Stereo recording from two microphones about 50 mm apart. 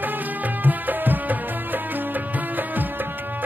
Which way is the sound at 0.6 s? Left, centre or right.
Right.